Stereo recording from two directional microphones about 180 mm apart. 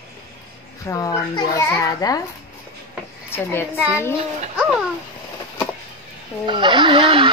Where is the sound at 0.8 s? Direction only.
20° left (ahead or behind).